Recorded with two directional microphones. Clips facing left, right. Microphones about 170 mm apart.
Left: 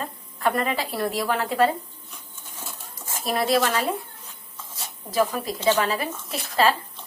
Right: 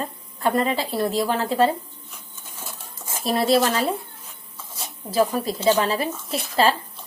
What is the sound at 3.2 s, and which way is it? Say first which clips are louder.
Speech: right 3 dB; 30° right (ahead or behind).